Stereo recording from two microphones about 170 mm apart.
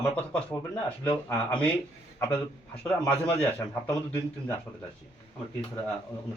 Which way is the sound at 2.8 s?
5° left (ahead or behind).